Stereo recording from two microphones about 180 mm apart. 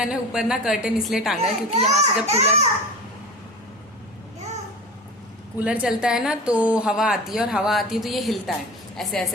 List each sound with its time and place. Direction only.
0.0 s a woman's voice: 5° right (ahead or behind)
1.7 s a child's voice: 35° right (ahead or behind)
5.5 s a woman's voice: 5° right (ahead or behind)